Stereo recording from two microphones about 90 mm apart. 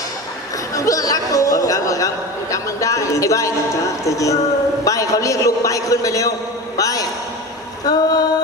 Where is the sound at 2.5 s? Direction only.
35° left (ahead or behind).